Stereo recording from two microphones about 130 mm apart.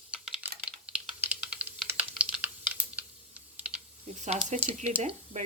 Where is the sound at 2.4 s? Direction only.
10° right (ahead or behind).